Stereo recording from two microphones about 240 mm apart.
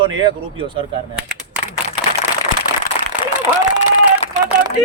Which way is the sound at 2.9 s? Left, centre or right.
Left.